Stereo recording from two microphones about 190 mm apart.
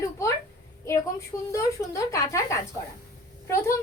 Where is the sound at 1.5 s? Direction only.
15° left (ahead or behind).